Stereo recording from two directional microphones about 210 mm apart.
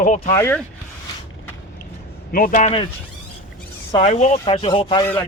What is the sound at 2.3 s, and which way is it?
Speech, 40° left (ahead or behind).